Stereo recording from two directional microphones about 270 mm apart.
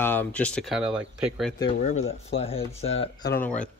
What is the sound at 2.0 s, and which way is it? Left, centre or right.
Speech, left.